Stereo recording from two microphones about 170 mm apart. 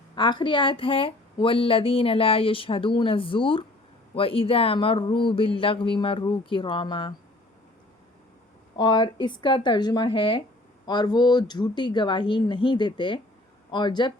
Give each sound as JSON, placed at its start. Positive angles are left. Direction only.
{"t": 0.2, "sound": "a woman's voice", "side_deg": 30}
{"t": 8.8, "sound": "speech", "side_deg": 25}